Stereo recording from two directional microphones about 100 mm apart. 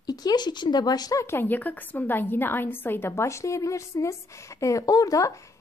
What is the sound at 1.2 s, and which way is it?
A woman's voice, 20° left (ahead or behind).